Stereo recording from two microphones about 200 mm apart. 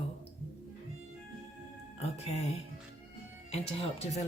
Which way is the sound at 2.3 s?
35° left (ahead or behind).